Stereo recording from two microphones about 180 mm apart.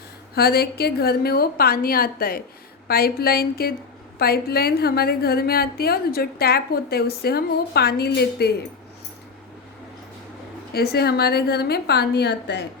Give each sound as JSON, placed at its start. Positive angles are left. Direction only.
{"t": 0.3, "sound": "a woman's voice", "side_deg": 60}
{"t": 10.7, "sound": "a woman's voice", "side_deg": 60}